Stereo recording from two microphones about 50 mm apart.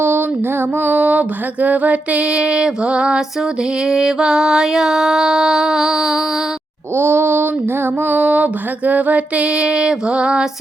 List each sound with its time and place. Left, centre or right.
0.0 s music: right
0.8 s music: right; by 6.2 s centre
6.9 s a sound: right
8.0 s music: right